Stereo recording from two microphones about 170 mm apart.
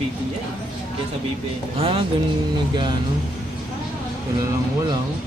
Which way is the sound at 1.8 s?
35° right (ahead or behind).